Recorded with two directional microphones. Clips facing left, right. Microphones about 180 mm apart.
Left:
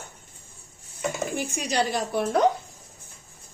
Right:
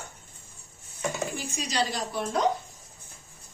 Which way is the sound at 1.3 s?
60° left (ahead or behind).